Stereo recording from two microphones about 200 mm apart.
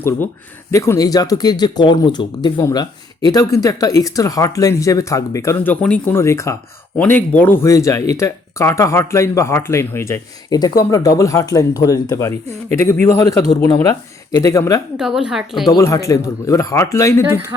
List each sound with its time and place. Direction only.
0.7 s speech: 15° left (ahead or behind)
14.9 s a woman's voice: 5° right (ahead or behind)
15.6 s speech: 20° left (ahead or behind)